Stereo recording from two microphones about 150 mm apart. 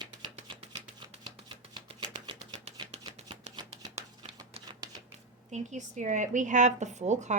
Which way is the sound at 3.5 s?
45° right (ahead or behind).